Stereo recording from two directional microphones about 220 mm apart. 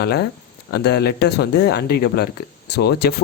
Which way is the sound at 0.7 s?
50° left (ahead or behind).